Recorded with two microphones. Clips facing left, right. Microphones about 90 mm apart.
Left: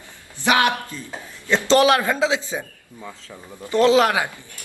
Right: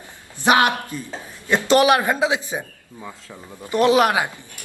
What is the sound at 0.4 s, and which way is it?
A man's voice, 20° right (ahead or behind).